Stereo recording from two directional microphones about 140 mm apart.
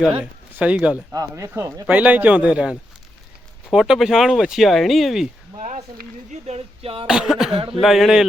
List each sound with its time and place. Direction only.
0.2 s speech: 10° right (ahead or behind)
1.1 s speech: 25° right (ahead or behind); by 5.3 s centre (ahead or behind)
5.5 s speech: 65° right (ahead or behind); by 7.1 s 40° right (ahead or behind)
7.1 s speech: 5° right (ahead or behind)